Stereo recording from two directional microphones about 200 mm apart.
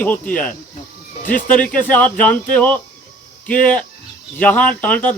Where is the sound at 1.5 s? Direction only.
5° left (ahead or behind).